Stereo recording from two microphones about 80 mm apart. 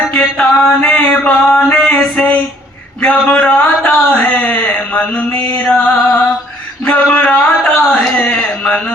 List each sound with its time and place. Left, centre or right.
0.1 s mantra: centre
3.4 s speech: centre
4.4 s a sound: left